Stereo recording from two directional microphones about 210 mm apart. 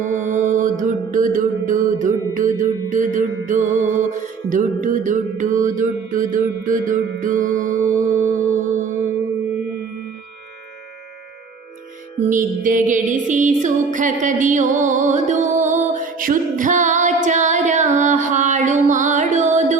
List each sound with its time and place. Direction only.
0.0 s music: 35° right (ahead or behind)
3.6 s music: 10° right (ahead or behind)
4.1 s mantra: 35° right (ahead or behind)
5.6 s music: 35° right (ahead or behind)
12.3 s music: 40° right (ahead or behind)